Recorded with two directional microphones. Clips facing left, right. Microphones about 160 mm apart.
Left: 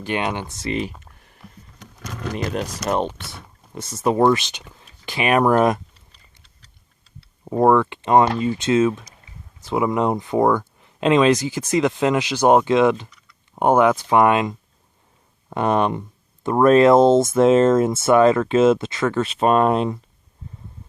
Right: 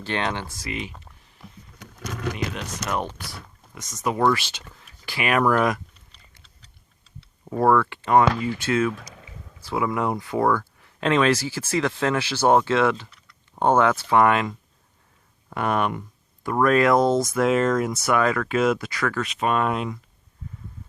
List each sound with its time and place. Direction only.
0.0 s speech: 15° left (ahead or behind)
0.7 s speech: 35° left (ahead or behind)
2.3 s speech: 40° left (ahead or behind)
3.3 s speech: 30° left (ahead or behind)
7.4 s speech: 20° left (ahead or behind)